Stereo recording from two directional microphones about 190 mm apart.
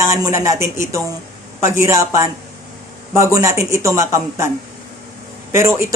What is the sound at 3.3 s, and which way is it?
A woman's voice, 15° right (ahead or behind).